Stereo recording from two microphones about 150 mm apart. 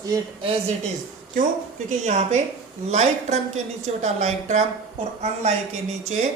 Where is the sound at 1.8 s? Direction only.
50° right (ahead or behind).